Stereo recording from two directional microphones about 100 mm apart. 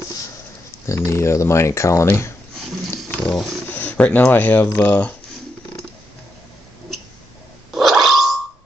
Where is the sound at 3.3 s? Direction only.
Centre (ahead or behind).